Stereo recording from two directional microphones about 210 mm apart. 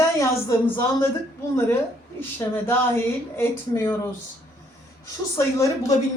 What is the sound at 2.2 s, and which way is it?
Speech, 10° left (ahead or behind).